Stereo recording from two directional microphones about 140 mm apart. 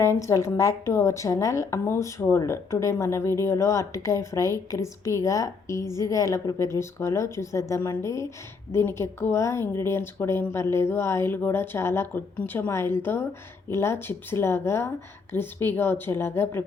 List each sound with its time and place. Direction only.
0.0 s a woman's voice: 20° left (ahead or behind)